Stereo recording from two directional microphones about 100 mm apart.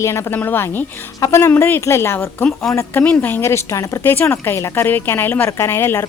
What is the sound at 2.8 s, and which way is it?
A woman's voice, 20° left (ahead or behind).